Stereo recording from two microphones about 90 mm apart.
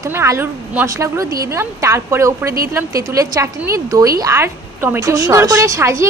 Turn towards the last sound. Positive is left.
turn(degrees=-35)  # may be behind; listen again after turning